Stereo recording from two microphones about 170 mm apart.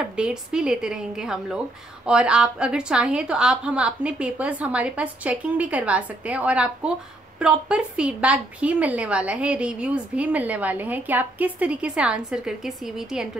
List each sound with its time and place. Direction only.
0.1 s a woman's voice: 5° right (ahead or behind)